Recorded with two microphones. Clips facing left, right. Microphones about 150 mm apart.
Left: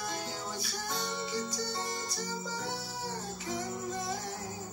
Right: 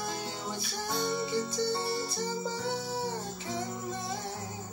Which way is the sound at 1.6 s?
25° right (ahead or behind).